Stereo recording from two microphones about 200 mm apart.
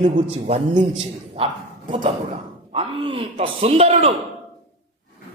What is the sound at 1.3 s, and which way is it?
Bow-wow, 30° right (ahead or behind).